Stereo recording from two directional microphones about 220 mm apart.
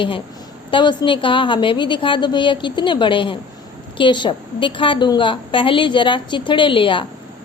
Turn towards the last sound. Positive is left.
turn(degrees=25)  # may be behind; listen again after turning